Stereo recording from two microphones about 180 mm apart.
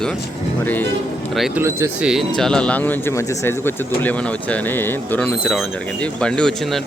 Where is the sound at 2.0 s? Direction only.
Centre (ahead or behind).